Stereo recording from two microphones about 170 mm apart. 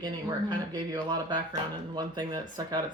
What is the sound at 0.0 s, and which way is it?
Speech, 25° right (ahead or behind).